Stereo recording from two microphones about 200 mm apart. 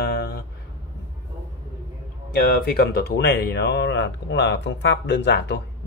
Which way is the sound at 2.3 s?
50° left (ahead or behind).